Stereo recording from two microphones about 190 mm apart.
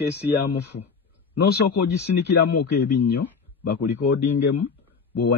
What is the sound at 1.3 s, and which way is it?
Speech, 65° left (ahead or behind).